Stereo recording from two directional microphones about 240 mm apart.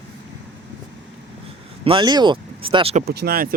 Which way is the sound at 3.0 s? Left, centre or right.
Right.